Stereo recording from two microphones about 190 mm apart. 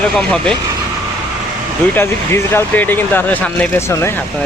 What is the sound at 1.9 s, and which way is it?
Speech, 10° left (ahead or behind).